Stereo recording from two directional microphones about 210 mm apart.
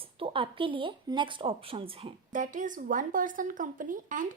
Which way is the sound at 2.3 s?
40° right (ahead or behind).